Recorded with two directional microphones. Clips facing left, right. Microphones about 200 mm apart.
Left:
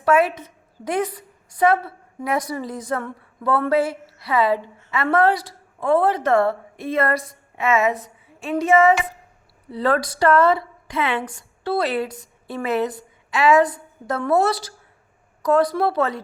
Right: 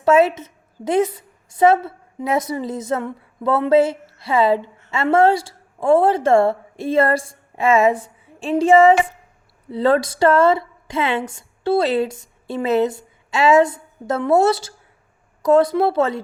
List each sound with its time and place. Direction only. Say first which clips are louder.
0.0 s a woman's voice: right 4 dB; 25° right (ahead or behind)